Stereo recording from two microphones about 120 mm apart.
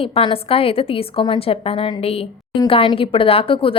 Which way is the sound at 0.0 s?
50° left (ahead or behind).